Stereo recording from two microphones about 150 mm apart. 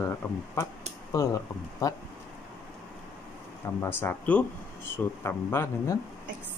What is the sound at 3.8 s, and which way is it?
Speech, 15° left (ahead or behind).